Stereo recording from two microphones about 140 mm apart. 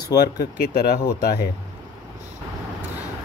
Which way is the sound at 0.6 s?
90° left.